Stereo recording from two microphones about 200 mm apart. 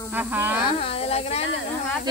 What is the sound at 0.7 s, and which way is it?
Speech, 30° left (ahead or behind).